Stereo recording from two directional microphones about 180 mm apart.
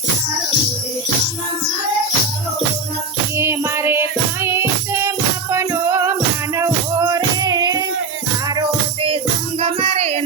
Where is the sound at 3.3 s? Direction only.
15° right (ahead or behind).